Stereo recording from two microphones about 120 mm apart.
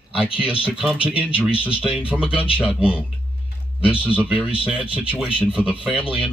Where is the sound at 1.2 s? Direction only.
45° left (ahead or behind).